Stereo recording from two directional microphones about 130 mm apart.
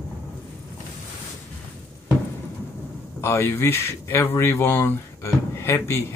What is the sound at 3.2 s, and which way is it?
Speech, 20° left (ahead or behind).